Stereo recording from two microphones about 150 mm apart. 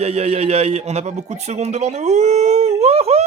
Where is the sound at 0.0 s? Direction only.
45° right (ahead or behind).